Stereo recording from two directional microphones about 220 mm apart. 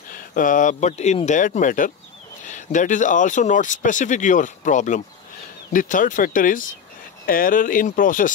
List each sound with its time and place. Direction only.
0.1 s speech: 40° left (ahead or behind)